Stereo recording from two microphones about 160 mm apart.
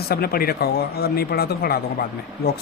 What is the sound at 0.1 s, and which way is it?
Speech, 70° left (ahead or behind).